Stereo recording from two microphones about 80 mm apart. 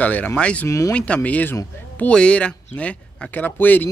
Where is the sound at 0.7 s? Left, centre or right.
Left.